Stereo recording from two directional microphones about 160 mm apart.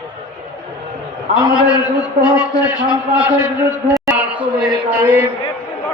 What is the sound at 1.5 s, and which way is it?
A man's voice, 25° left (ahead or behind).